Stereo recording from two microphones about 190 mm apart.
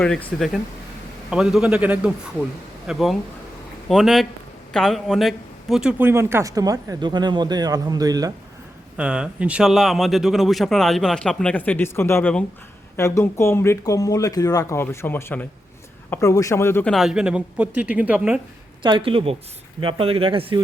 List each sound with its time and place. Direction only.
0.0 s a man's voice: 5° left (ahead or behind); by 8.3 s 20° right (ahead or behind)
9.0 s a man's voice: 5° right (ahead or behind); by 16.9 s 10° left (ahead or behind)
16.9 s a man's voice: centre (ahead or behind)
18.8 s speech: 25° right (ahead or behind)